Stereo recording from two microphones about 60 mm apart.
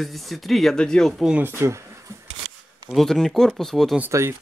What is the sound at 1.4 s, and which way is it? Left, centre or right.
Speech, right.